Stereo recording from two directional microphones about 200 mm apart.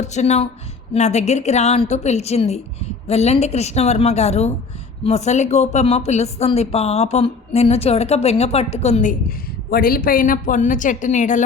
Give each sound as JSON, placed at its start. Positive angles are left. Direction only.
{"t": 0.0, "sound": "a woman's voice", "side_deg": 35}
{"t": 9.6, "sound": "a woman's voice", "side_deg": 50}